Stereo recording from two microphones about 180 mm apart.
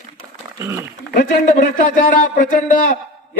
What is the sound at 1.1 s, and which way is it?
A man's voice, 45° left (ahead or behind).